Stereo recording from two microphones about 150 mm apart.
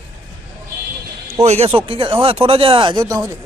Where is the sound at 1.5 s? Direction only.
40° right (ahead or behind); by 3.3 s 25° right (ahead or behind).